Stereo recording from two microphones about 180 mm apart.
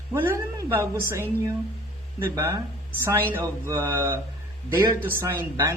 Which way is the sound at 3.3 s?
15° right (ahead or behind).